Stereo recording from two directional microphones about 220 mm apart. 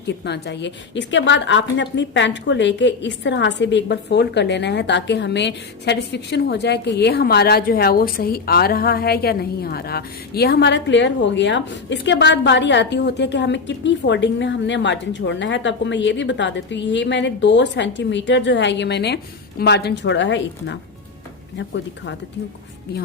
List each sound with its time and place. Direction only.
0.3 s a woman's voice: 50° left (ahead or behind)